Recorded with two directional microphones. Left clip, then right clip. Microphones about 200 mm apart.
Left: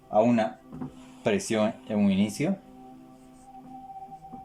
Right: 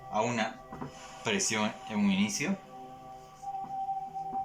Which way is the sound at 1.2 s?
60° left (ahead or behind).